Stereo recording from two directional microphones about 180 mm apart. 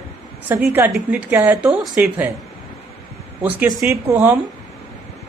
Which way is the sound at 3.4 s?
10° right (ahead or behind).